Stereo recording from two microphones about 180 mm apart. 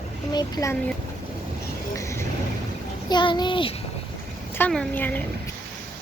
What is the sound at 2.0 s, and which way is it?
Vehicle, 15° left (ahead or behind).